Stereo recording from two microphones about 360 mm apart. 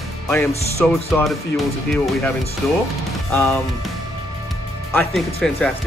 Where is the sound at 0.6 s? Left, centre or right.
Centre.